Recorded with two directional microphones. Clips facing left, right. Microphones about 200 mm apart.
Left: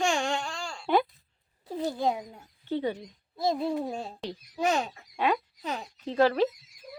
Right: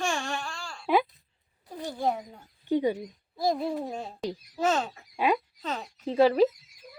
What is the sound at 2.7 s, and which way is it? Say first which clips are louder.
Speech: right 4 dB; 10° right (ahead or behind).